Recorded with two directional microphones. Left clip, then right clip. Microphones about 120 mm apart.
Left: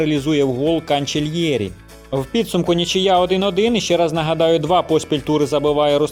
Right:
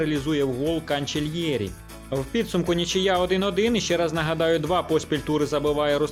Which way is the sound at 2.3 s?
40° left (ahead or behind).